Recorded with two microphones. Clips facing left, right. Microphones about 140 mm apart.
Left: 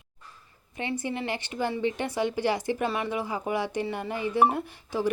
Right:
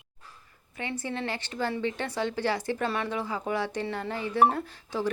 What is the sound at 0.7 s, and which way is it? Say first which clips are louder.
Speech: left 2 dB; 15° left (ahead or behind).